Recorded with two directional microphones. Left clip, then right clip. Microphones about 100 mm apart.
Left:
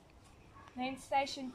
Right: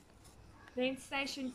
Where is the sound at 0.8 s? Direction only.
50° left (ahead or behind).